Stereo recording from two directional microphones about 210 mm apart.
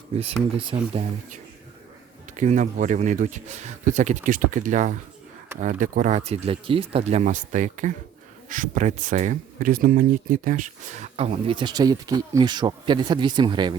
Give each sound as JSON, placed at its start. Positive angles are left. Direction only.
{"t": 0.7, "sound": "speech", "side_deg": -25}
{"t": 2.3, "sound": "speech", "side_deg": -35}